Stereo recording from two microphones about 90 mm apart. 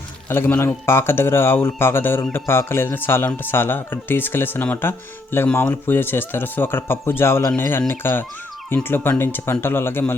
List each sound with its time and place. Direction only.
0.3 s speech: 25° left (ahead or behind)